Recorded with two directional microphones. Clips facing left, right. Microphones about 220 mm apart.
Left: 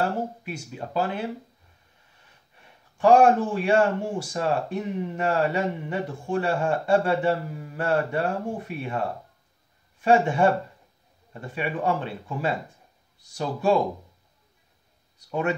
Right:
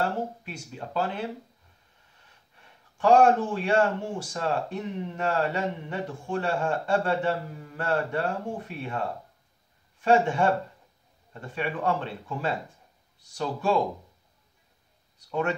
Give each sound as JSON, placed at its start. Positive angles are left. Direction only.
{"t": 0.4, "sound": "speech", "side_deg": 10}
{"t": 3.0, "sound": "speech", "side_deg": 10}
{"t": 10.0, "sound": "speech", "side_deg": 10}